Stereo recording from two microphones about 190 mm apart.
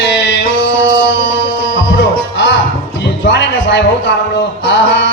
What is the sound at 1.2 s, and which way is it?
Music, 75° left (ahead or behind).